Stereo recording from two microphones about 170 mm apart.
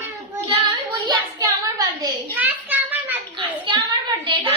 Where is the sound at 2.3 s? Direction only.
10° right (ahead or behind).